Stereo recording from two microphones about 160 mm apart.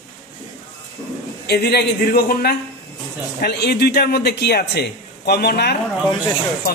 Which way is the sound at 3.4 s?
90° left.